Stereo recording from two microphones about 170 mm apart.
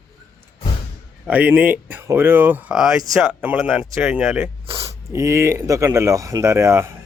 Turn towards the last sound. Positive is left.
turn(degrees=-15)  # may be behind; listen again after turning